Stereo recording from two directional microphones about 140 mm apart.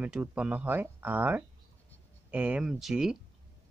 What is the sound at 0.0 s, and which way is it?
Speech, 10° right (ahead or behind).